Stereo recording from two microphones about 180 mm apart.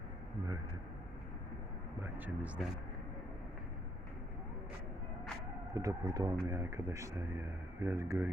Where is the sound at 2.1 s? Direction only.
10° right (ahead or behind).